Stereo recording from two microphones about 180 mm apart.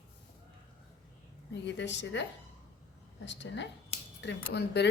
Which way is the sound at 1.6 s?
80° left.